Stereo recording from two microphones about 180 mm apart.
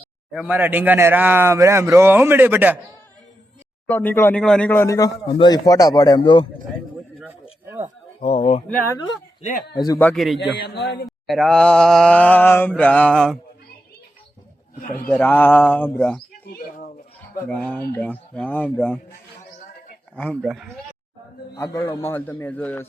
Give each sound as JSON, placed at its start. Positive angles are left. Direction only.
{"t": 0.3, "sound": "speech", "side_deg": -5}
{"t": 3.8, "sound": "a man's voice", "side_deg": 10}
{"t": 8.2, "sound": "speech", "side_deg": 35}
{"t": 9.4, "sound": "a man's voice", "side_deg": 45}
{"t": 9.7, "sound": "a man's voice", "side_deg": 20}
{"t": 10.0, "sound": "mantra", "side_deg": 5}
{"t": 10.6, "sound": "a man's voice", "side_deg": 65}
{"t": 11.3, "sound": "mantra", "side_deg": 0}
{"t": 14.9, "sound": "speech", "side_deg": 10}
{"t": 16.5, "sound": "a sound", "side_deg": 50}
{"t": 17.5, "sound": "speech", "side_deg": 5}
{"t": 20.1, "sound": "mantra", "side_deg": 5}
{"t": 21.5, "sound": "speech", "side_deg": 15}